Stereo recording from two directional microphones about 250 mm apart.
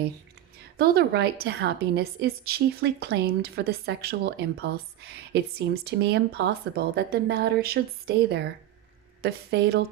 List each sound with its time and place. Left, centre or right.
0.8 s a woman's voice: right